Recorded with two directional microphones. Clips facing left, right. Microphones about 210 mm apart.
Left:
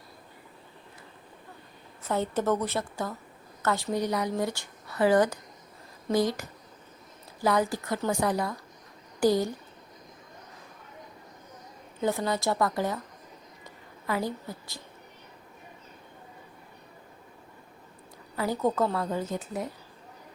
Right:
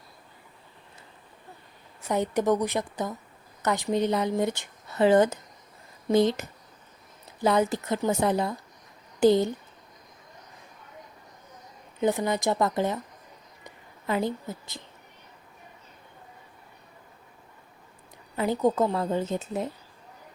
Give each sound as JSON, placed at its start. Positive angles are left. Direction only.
{"t": 2.0, "sound": "a woman's voice", "side_deg": -15}
{"t": 11.9, "sound": "speech", "side_deg": -20}
{"t": 13.7, "sound": "a sound", "side_deg": -20}
{"t": 18.3, "sound": "speech", "side_deg": -20}